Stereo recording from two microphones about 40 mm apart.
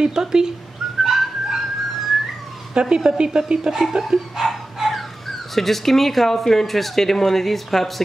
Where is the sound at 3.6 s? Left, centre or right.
Centre.